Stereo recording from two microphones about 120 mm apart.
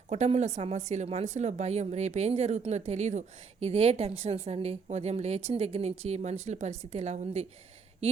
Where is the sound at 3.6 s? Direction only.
55° right (ahead or behind).